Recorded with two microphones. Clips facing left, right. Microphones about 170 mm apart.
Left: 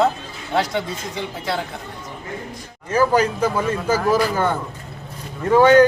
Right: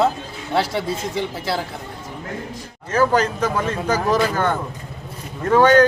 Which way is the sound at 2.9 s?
10° left (ahead or behind).